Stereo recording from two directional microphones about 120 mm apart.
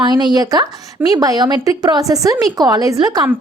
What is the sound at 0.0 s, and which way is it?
A woman's voice, 35° right (ahead or behind).